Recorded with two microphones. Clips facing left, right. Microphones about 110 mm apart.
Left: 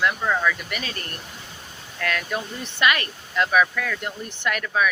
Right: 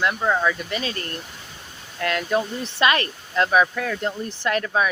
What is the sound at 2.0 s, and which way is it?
Speech, 25° right (ahead or behind).